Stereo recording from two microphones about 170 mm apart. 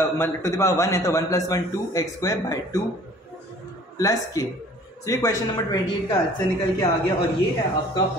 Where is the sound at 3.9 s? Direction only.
20° left (ahead or behind).